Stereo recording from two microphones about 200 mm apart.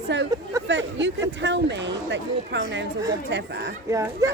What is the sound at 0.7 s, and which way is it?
Speech, 65° right (ahead or behind).